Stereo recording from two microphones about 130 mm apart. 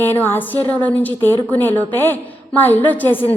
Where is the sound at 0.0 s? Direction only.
15° left (ahead or behind).